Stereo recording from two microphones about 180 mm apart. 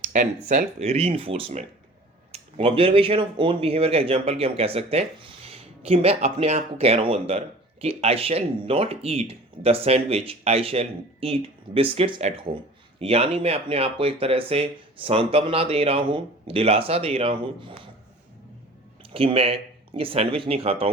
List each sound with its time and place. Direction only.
0.0 s speech: 45° right (ahead or behind)
19.1 s speech: 30° right (ahead or behind)